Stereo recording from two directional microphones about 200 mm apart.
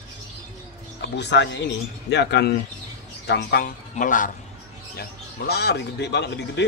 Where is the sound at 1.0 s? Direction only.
60° left (ahead or behind).